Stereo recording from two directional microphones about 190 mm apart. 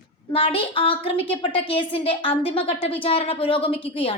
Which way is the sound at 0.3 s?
30° left (ahead or behind).